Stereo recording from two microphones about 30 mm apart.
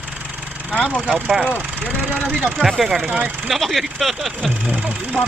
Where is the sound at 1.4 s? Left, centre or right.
Right.